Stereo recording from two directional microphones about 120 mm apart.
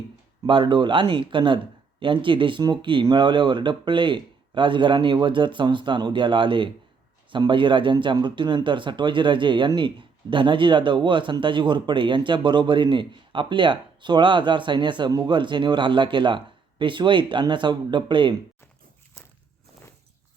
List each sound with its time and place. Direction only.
0.4 s speech: 45° right (ahead or behind)